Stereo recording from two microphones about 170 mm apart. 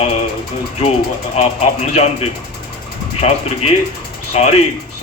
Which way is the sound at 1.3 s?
40° left (ahead or behind).